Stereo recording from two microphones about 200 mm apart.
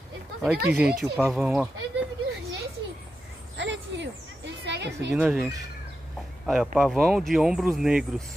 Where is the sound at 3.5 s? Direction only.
65° right (ahead or behind).